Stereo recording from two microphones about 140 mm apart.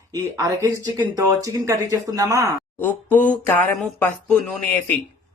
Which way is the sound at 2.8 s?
10° left (ahead or behind).